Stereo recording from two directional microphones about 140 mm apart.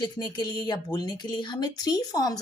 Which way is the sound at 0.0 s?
30° left (ahead or behind).